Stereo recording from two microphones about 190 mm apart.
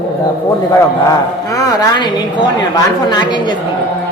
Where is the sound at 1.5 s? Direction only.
20° left (ahead or behind).